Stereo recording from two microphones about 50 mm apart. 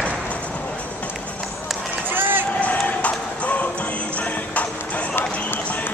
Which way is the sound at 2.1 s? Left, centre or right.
Right.